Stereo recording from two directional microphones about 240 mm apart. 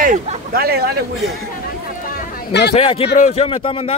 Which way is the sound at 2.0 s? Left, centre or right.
Left.